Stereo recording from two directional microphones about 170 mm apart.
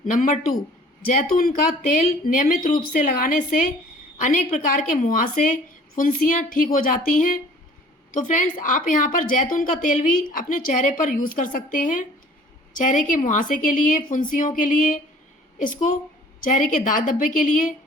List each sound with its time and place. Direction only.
0.0 s a woman's voice: 50° left (ahead or behind)
1.8 s a woman's voice: 50° left (ahead or behind)